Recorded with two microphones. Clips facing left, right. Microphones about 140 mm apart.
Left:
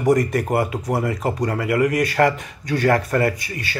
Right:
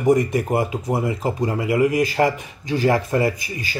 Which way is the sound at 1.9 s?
70° left (ahead or behind).